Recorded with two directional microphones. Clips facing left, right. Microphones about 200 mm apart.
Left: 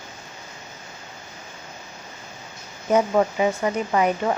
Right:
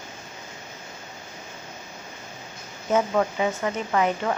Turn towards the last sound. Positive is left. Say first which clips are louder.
# left 2 dB
turn(degrees=15)  # may be behind; listen again after turning